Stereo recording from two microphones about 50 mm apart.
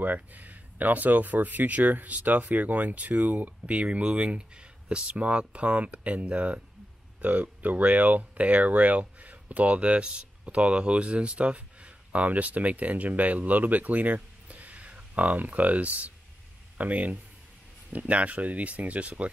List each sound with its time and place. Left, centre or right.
0.0 s speech: right